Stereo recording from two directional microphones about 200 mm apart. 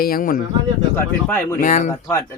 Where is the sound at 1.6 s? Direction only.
40° left (ahead or behind).